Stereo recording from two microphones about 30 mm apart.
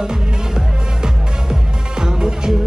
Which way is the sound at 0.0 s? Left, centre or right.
Centre.